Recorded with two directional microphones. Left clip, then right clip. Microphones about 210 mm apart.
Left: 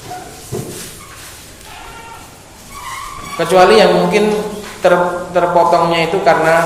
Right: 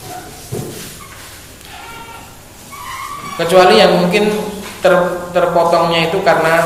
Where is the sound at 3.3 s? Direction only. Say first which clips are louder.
Even; 10° left (ahead or behind).